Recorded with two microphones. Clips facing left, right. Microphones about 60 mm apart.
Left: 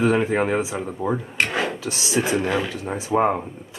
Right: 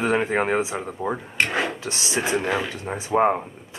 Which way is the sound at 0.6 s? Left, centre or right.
Centre.